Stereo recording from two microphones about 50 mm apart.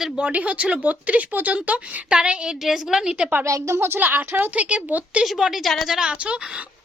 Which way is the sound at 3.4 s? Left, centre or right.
Right.